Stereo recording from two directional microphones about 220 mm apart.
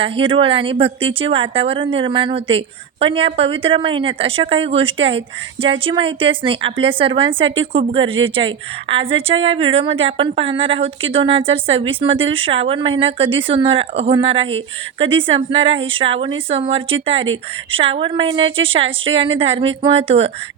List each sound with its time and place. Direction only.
0.0 s a woman's voice: 25° right (ahead or behind)